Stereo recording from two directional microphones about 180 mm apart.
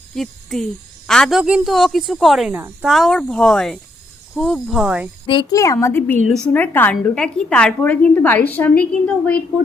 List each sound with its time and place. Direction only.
0.1 s a woman's voice: centre (ahead or behind)
5.2 s a woman's voice: 25° left (ahead or behind); by 9.4 s 5° left (ahead or behind)